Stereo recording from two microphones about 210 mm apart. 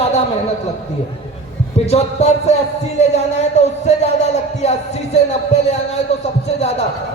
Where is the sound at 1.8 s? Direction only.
30° left (ahead or behind).